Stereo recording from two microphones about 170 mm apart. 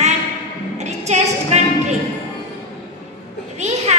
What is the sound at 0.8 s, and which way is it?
Music, 40° right (ahead or behind).